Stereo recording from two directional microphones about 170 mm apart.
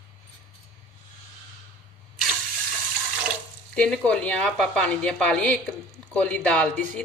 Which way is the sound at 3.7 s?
5° left (ahead or behind).